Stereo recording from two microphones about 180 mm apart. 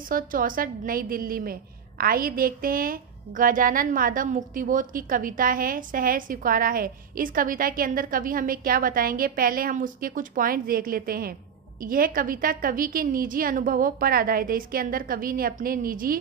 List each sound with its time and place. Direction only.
0.1 s a woman's voice: 50° right (ahead or behind)